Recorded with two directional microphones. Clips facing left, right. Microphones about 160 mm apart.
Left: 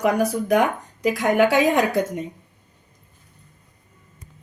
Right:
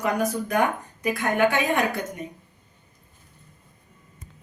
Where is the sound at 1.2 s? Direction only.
90° left.